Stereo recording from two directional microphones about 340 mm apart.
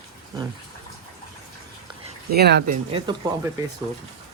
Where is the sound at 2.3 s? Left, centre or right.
Right.